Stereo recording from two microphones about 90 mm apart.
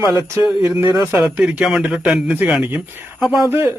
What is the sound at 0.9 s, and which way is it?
Speech, 30° right (ahead or behind).